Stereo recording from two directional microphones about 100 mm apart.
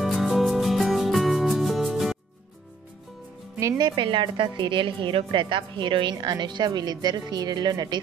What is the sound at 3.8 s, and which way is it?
A woman's voice, 50° right (ahead or behind).